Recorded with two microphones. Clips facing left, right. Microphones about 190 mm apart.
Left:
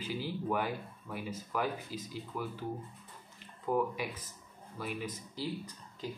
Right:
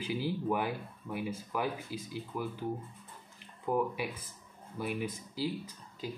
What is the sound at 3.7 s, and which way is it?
Speech, 10° right (ahead or behind).